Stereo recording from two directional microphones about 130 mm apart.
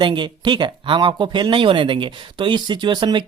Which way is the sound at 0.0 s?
35° right (ahead or behind).